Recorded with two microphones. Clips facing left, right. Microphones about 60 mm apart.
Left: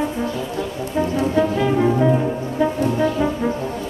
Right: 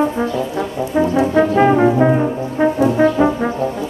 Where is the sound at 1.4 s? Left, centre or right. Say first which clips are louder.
Right 6 dB; right.